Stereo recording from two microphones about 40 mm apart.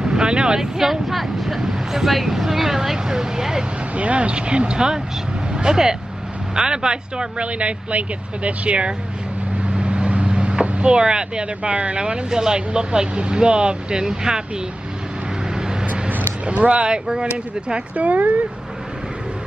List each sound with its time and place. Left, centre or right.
0.0 s speech: right
1.0 s speech: centre
3.9 s speech: right; by 14.4 s centre
15.5 s vehicle: centre
15.9 s vehicle: right
16.5 s speech: right
16.9 s speech: right
17.9 s speech: right